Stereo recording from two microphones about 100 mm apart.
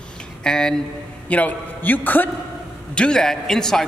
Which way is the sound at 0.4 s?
5° left (ahead or behind).